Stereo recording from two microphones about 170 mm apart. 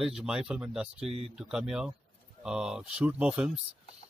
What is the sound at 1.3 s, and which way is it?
A man's voice, 5° right (ahead or behind).